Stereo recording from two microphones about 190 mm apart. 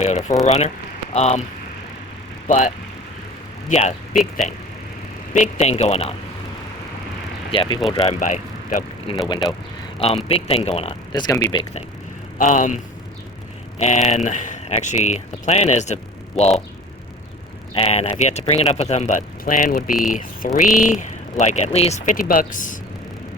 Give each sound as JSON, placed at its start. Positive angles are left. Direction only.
{"t": 0.0, "sound": "speech", "side_deg": 35}
{"t": 2.5, "sound": "speech", "side_deg": 40}
{"t": 4.1, "sound": "speech", "side_deg": 0}
{"t": 5.3, "sound": "speech", "side_deg": 40}
{"t": 7.5, "sound": "speech", "side_deg": 25}
{"t": 8.2, "sound": "speech", "side_deg": 45}
{"t": 10.2, "sound": "speech", "side_deg": 30}
{"t": 12.4, "sound": "speech", "side_deg": 40}
{"t": 17.7, "sound": "speech", "side_deg": 30}